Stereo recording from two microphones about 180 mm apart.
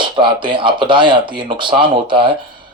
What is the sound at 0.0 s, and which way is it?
Speech, 25° right (ahead or behind).